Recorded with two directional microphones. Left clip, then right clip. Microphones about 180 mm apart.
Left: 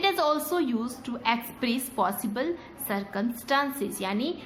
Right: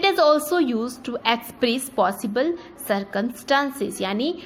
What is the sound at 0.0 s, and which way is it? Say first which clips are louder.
A woman's voice: right 7 dB; 30° right (ahead or behind).